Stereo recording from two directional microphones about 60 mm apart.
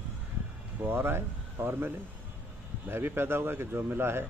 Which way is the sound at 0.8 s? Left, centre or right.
Right.